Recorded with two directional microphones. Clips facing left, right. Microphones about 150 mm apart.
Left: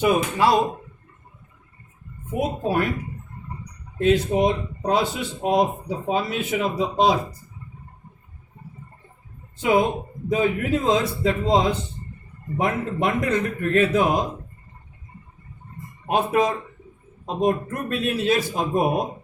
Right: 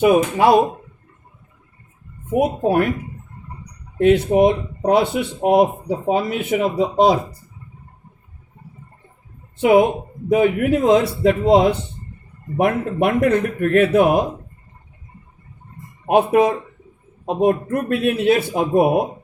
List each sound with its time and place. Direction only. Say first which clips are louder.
0.0 s speech: right 5 dB; 55° right (ahead or behind)
2.3 s speech: right 6 dB; 60° right (ahead or behind)
4.0 s speech: right 5 dB; 60° right (ahead or behind)
9.6 s speech: right 6 dB; 70° right (ahead or behind)
16.0 s speech: right 6 dB; 60° right (ahead or behind)
17.7 s speech: right 6 dB; 65° right (ahead or behind)